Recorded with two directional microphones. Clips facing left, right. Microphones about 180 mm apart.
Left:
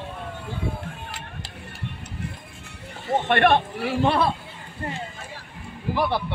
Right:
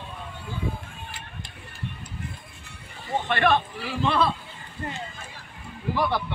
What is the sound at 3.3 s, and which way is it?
Speech, 60° left (ahead or behind).